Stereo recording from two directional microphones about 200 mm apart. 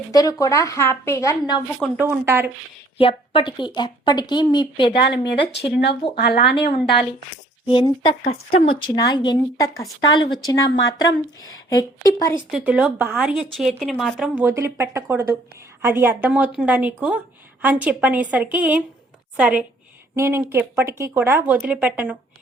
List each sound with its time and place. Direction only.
0.1 s a woman's voice: 15° left (ahead or behind)
2.0 s speech: 10° right (ahead or behind)
3.0 s a woman's voice: 25° left (ahead or behind)
5.3 s speech: 60° left (ahead or behind)
6.6 s a woman's voice: 25° left (ahead or behind)
12.5 s speech: 5° right (ahead or behind)